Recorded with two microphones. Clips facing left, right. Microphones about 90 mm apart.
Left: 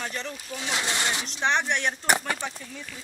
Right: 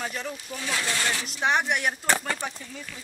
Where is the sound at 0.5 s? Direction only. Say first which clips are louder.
Left 1 dB; 20° left (ahead or behind).